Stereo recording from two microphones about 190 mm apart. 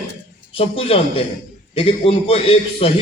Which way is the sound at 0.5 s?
30° left (ahead or behind).